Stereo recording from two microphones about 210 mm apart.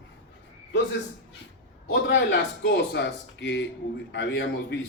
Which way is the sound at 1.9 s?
60° left (ahead or behind).